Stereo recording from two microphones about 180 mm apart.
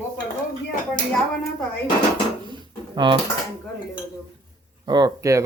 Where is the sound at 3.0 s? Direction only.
25° right (ahead or behind).